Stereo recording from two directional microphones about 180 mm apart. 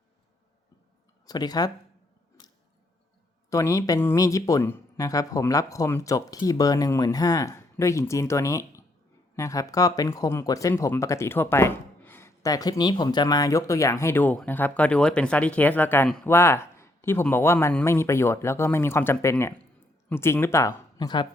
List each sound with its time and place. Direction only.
1.3 s speech: 20° left (ahead or behind)
3.5 s speech: 20° left (ahead or behind)